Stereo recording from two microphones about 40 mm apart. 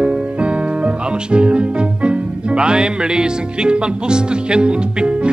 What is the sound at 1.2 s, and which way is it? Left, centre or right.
Speech, right.